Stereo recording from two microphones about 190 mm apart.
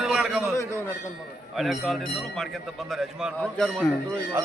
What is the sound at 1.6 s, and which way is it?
A man's voice, centre (ahead or behind).